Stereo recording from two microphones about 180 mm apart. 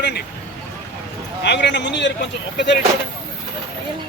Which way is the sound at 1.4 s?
75° left (ahead or behind).